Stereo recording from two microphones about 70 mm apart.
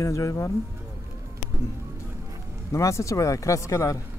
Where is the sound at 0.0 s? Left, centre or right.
Left.